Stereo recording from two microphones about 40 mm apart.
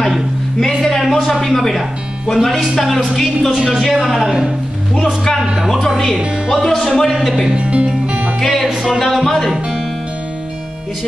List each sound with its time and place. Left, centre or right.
0.0 s a sound: centre
0.7 s speech: centre
1.8 s speech: centre
5.4 s a woman's voice: centre
6.5 s speech: centre
7.5 s music: right
8.4 s music: centre
8.8 s speech: centre